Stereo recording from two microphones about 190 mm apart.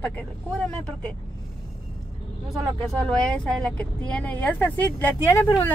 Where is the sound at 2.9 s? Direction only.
5° left (ahead or behind).